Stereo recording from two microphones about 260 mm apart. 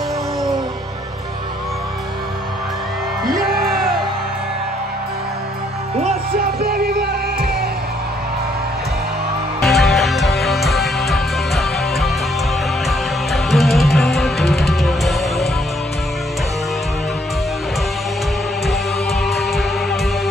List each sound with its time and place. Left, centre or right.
6.0 s music: right
9.6 s music: centre
19.2 s music: centre